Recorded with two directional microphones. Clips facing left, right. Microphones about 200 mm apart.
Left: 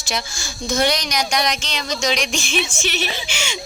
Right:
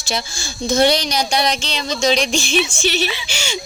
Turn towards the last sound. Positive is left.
turn(degrees=-35)  # may be behind; listen again after turning